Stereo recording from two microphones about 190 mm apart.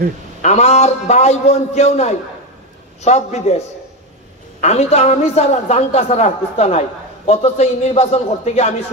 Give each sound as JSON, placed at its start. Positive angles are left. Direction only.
{"t": 0.4, "sound": "a man's voice", "side_deg": 35}